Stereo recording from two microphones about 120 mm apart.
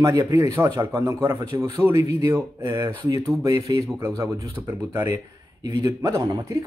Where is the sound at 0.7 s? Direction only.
40° right (ahead or behind).